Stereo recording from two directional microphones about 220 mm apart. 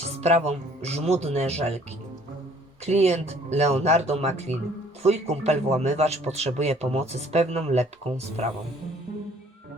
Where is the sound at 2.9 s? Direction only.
30° right (ahead or behind).